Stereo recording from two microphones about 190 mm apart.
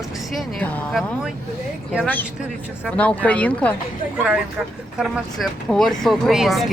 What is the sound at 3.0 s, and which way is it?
Speech, 5° left (ahead or behind).